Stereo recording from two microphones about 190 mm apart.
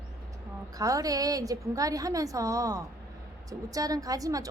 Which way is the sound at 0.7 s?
20° right (ahead or behind).